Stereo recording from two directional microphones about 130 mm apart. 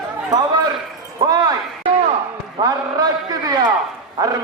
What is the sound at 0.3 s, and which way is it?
Speech, 30° right (ahead or behind).